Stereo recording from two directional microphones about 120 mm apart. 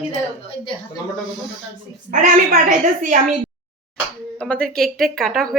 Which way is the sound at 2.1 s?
90° right.